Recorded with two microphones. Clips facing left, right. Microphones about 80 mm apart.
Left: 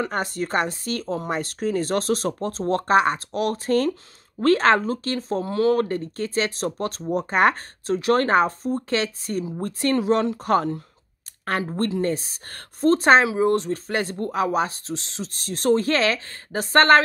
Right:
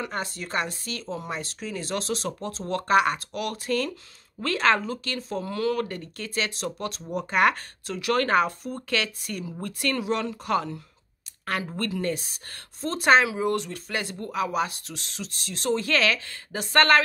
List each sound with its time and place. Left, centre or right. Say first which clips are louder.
0.0 s speech: left 6 dB; left
11.6 s speech: left 7 dB; left